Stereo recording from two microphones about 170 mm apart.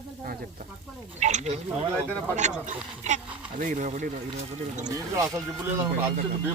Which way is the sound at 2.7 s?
45° right (ahead or behind).